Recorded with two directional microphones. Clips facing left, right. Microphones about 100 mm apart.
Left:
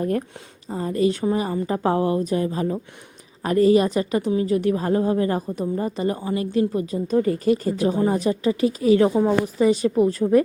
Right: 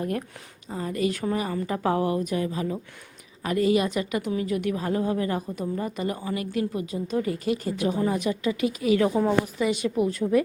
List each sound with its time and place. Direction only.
0.0 s speech: 35° left (ahead or behind)